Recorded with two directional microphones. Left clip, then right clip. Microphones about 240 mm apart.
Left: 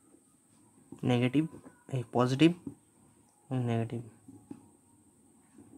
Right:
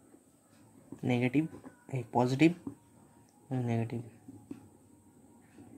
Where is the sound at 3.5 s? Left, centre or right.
Centre.